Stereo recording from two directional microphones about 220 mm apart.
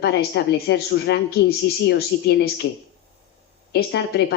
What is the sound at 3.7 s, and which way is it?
Speech, 50° left (ahead or behind).